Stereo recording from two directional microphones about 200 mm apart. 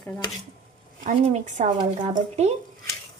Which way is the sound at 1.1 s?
35° right (ahead or behind).